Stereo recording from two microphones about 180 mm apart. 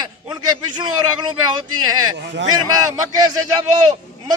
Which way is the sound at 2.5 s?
20° right (ahead or behind).